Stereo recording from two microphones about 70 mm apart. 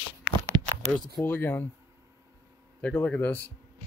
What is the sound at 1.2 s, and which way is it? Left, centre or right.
Speech, left.